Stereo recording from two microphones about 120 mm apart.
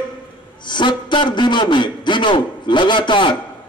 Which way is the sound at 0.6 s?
40° left (ahead or behind).